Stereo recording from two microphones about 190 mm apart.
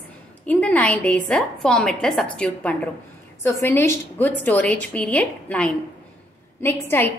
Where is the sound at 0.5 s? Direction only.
5° left (ahead or behind).